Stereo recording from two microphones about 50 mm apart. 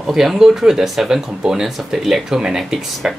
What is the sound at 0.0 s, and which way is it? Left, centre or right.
Speech, centre.